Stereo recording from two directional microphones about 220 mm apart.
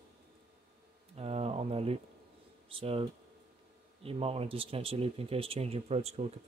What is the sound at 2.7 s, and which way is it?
Speech, 25° right (ahead or behind).